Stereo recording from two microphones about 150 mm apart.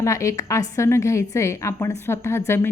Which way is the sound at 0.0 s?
20° left (ahead or behind).